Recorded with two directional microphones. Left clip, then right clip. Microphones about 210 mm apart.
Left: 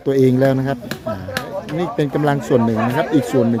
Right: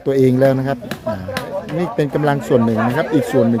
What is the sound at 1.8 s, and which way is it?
Speech, 5° right (ahead or behind).